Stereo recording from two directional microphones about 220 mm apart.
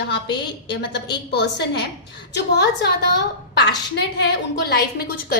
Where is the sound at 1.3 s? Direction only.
50° left (ahead or behind).